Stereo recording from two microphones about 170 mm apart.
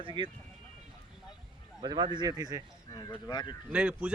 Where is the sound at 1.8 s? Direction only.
25° right (ahead or behind).